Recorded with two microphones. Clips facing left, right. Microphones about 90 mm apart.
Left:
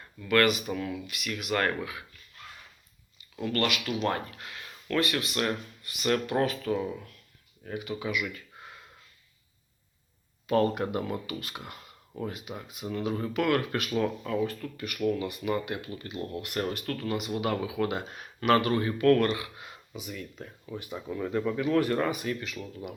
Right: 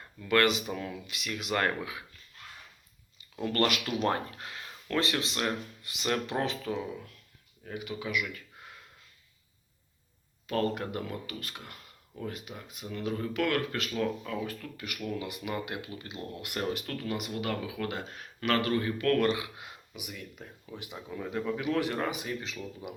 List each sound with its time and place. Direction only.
0.2 s speech: 25° right (ahead or behind)
3.4 s speech: 30° right (ahead or behind)
4.1 s speech: 30° right (ahead or behind); by 6.8 s 10° right (ahead or behind)
7.6 s speech: centre (ahead or behind)
10.5 s speech: 15° left (ahead or behind)
14.4 s speech: 10° right (ahead or behind)
16.6 s speech: 5° right (ahead or behind)
17.4 s speech: 15° left (ahead or behind)
19.2 s speech: 15° right (ahead or behind)